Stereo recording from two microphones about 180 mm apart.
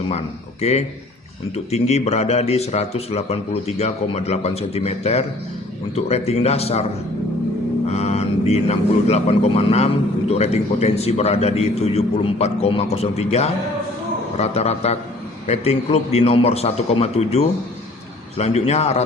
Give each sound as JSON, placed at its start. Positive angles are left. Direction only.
{"t": 0.1, "sound": "speech", "side_deg": 35}
{"t": 7.9, "sound": "speech", "side_deg": 35}